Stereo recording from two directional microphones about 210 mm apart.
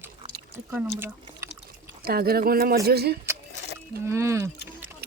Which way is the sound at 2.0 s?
45° right (ahead or behind).